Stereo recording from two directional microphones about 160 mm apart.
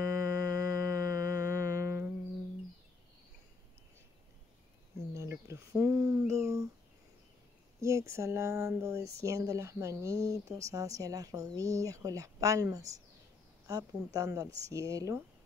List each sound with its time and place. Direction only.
0.0 s music: 20° right (ahead or behind)
5.1 s a sound: 20° right (ahead or behind)
7.8 s speech: 20° right (ahead or behind)